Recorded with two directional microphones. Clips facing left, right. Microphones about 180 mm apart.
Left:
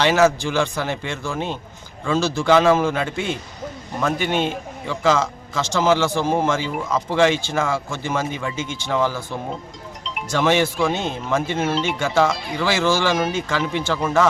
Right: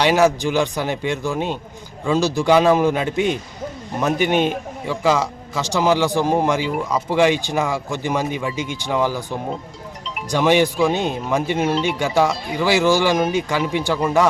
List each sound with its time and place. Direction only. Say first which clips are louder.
0.0 s a man's voice: right 1 dB; 15° right (ahead or behind)